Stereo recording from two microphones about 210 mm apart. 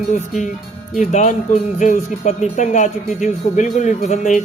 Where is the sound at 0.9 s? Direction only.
35° left (ahead or behind).